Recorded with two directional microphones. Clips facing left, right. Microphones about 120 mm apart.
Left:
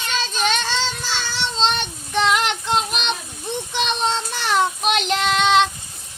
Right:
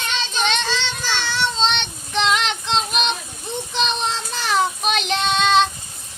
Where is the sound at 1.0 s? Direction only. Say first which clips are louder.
Right 2 dB; 70° right (ahead or behind).